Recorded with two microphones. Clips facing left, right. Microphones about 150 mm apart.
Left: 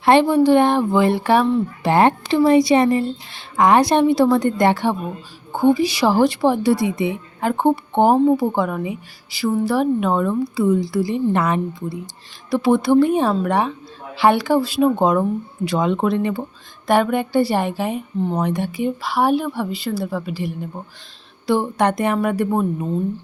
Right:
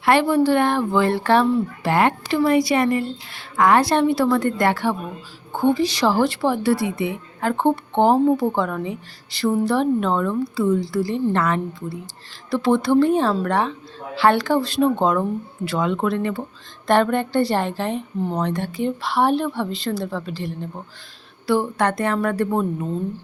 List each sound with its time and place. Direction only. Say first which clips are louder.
0.0 s a woman's voice: left 3 dB; 20° left (ahead or behind)
1.9 s a woman's voice: left 4 dB; 25° left (ahead or behind)
5.5 s speech: left 3 dB; 10° left (ahead or behind)